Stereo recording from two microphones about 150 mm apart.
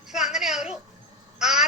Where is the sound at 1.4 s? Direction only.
5° right (ahead or behind).